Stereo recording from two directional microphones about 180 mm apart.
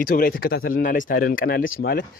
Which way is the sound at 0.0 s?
50° left (ahead or behind).